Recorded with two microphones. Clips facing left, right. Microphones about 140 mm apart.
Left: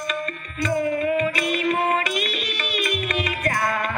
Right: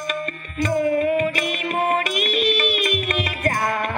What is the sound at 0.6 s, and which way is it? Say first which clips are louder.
Music: right 3 dB; 45° right (ahead or behind).